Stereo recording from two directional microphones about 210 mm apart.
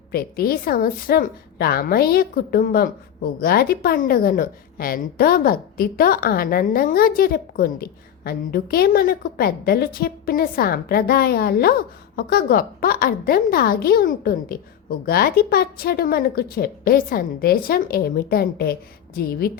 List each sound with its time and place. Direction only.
0.1 s a woman's voice: 45° left (ahead or behind)